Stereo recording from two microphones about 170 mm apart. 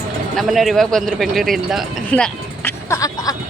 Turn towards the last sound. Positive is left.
turn(degrees=20)  # may be behind; listen again after turning